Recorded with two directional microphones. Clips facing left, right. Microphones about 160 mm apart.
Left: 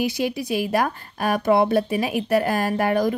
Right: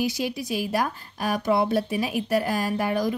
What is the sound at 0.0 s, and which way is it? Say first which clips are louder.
Speech: left 3 dB; 60° left (ahead or behind).